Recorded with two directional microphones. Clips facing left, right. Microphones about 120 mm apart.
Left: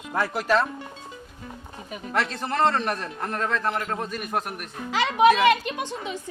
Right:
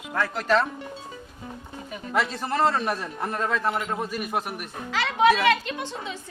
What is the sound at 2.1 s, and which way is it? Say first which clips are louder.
A man's voice: even; centre (ahead or behind).